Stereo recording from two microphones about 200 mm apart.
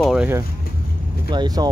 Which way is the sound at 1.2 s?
20° right (ahead or behind).